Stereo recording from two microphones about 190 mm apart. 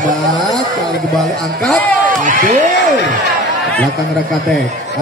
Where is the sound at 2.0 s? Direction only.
40° right (ahead or behind).